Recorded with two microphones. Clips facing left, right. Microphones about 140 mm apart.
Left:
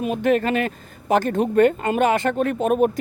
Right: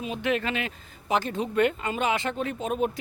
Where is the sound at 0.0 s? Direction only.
50° left (ahead or behind).